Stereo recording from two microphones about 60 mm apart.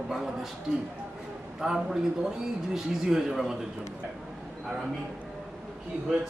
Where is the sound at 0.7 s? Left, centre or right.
Centre.